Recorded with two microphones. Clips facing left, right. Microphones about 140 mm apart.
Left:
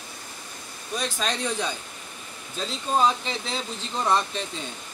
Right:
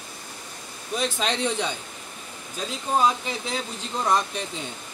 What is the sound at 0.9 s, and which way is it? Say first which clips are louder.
Speech: right 2 dB; 20° right (ahead or behind).